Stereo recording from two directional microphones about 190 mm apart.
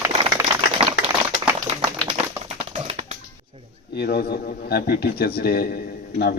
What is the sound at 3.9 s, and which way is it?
Speech, 60° left (ahead or behind).